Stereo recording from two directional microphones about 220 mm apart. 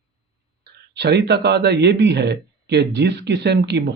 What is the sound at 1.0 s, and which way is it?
Speech, 50° right (ahead or behind).